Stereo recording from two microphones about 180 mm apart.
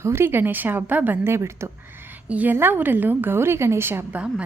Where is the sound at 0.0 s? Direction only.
15° right (ahead or behind).